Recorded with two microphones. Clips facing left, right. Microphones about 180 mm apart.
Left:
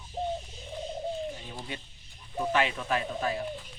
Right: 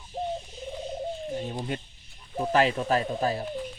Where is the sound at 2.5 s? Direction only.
40° right (ahead or behind).